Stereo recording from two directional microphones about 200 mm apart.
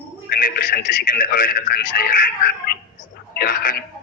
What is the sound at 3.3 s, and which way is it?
Speech, 45° left (ahead or behind).